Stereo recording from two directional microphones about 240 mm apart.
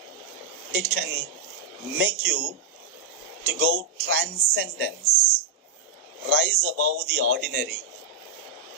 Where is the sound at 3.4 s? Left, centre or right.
Right.